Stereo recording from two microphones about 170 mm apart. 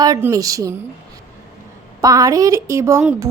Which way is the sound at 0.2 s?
20° right (ahead or behind).